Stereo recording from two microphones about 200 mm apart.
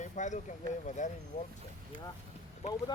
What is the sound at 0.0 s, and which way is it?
Speech, 35° left (ahead or behind).